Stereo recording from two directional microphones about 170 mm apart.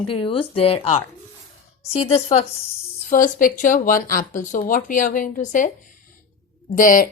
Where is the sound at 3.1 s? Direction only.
50° left (ahead or behind).